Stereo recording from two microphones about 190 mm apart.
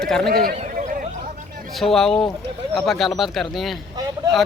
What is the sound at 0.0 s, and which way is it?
Speech, 5° left (ahead or behind).